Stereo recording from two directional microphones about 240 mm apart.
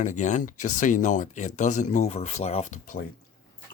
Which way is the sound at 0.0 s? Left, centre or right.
Left.